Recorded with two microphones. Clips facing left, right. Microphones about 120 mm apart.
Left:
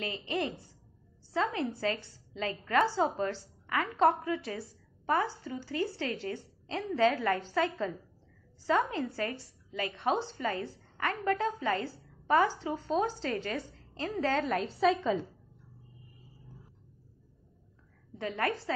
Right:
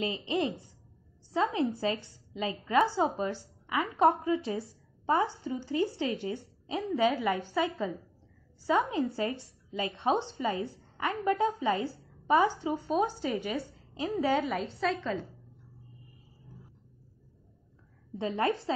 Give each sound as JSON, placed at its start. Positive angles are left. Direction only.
{"t": 0.0, "sound": "a woman's voice", "side_deg": -20}
{"t": 14.6, "sound": "a woman's voice", "side_deg": 0}
{"t": 18.1, "sound": "a woman's voice", "side_deg": -20}